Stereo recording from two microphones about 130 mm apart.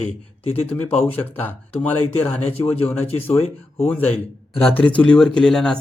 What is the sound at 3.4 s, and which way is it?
Speech, 50° left (ahead or behind).